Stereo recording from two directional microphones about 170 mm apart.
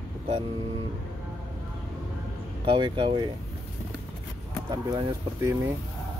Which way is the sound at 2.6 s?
30° right (ahead or behind).